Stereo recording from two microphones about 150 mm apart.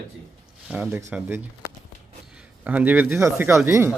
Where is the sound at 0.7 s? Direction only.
10° right (ahead or behind).